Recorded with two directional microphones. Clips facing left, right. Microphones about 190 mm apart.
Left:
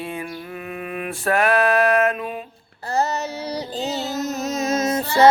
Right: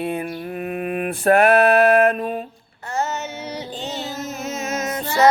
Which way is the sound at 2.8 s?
35° left (ahead or behind).